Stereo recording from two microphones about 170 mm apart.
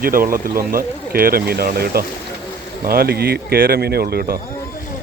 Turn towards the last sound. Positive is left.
turn(degrees=-65)  # may be behind; listen again after turning